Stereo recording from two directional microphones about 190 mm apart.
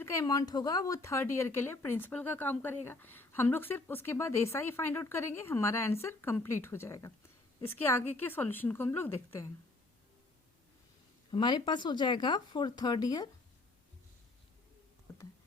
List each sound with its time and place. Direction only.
0.0 s speech: 15° left (ahead or behind)
11.3 s speech: 25° left (ahead or behind)